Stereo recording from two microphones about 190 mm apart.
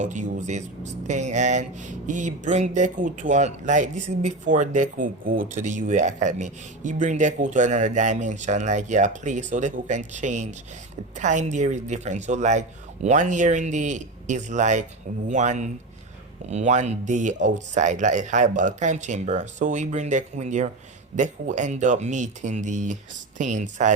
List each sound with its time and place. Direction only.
0.0 s speech: 40° right (ahead or behind)